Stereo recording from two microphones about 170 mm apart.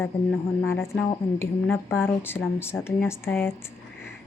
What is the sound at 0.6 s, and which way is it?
A woman's voice, 15° left (ahead or behind).